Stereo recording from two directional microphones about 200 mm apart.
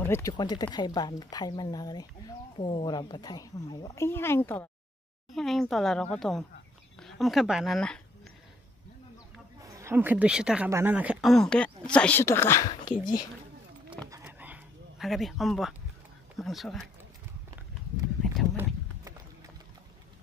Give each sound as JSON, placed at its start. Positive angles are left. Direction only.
{"t": 0.0, "sound": "speech", "side_deg": 15}
{"t": 9.7, "sound": "speech", "side_deg": -15}
{"t": 14.2, "sound": "a sound", "side_deg": -5}
{"t": 16.3, "sound": "speech", "side_deg": 0}
{"t": 18.2, "sound": "clip-clop", "side_deg": 0}